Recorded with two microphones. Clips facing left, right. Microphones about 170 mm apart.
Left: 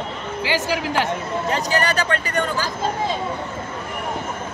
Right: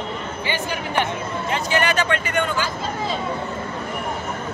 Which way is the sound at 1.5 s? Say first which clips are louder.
Even; 40° left (ahead or behind).